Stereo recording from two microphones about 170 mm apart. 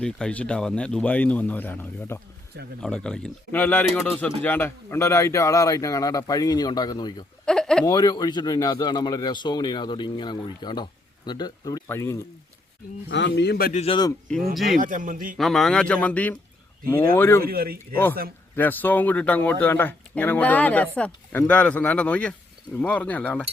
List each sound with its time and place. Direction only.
0.0 s a man's voice: 5° left (ahead or behind); by 7.3 s 25° left (ahead or behind)
7.4 s a sound: 5° left (ahead or behind)
7.9 s a man's voice: 25° left (ahead or behind)
13.1 s speech: 90° left; by 13.7 s 70° left (ahead or behind)
13.7 s a man's voice: 35° left (ahead or behind)
14.5 s speech: centre (ahead or behind)
14.8 s a man's voice: 50° right (ahead or behind)
15.4 s speech: centre (ahead or behind)
17.4 s speech: 60° right (ahead or behind)
18.5 s speech: 10° left (ahead or behind)